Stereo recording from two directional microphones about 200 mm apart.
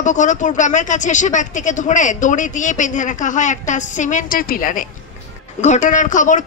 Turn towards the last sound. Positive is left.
turn(degrees=40)  # may be behind; listen again after turning